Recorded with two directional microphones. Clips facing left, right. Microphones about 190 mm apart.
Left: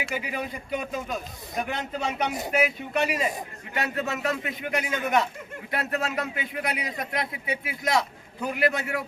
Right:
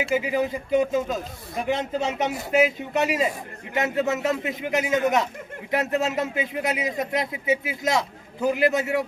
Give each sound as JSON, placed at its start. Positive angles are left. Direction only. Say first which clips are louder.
{"t": 0.0, "sound": "a man's voice", "louder": "right 8 dB", "side_deg": -25}